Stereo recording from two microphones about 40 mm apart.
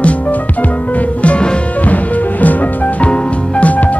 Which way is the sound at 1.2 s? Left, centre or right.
Left.